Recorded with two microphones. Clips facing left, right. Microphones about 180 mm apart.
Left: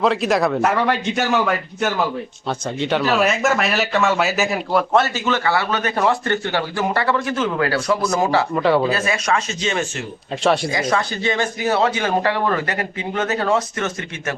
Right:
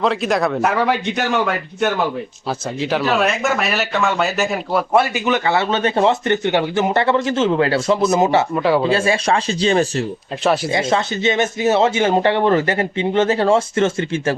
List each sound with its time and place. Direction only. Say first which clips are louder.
0.0 s speech: even; centre (ahead or behind)
2.5 s speech: even; centre (ahead or behind)
4.9 s speech: right 2 dB; 15° right (ahead or behind)
8.5 s speech: even; centre (ahead or behind)
8.8 s speech: right 4 dB; 30° right (ahead or behind)
10.4 s speech: even; 5° right (ahead or behind)
10.7 s speech: right 2 dB; 25° right (ahead or behind)